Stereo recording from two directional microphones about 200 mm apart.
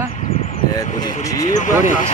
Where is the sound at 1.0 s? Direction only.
20° left (ahead or behind).